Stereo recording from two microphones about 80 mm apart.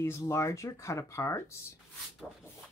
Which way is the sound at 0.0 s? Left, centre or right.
Left.